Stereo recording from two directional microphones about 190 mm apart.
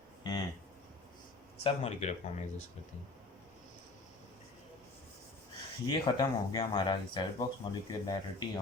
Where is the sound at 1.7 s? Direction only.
35° left (ahead or behind).